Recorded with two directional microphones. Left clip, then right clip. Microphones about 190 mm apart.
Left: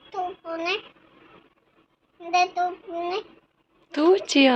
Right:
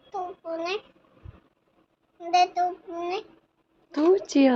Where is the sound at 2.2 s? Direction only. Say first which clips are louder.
Even; 30° right (ahead or behind).